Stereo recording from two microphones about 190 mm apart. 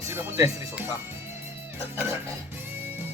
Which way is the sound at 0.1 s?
15° right (ahead or behind).